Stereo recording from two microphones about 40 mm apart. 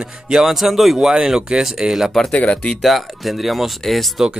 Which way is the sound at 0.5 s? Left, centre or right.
Centre.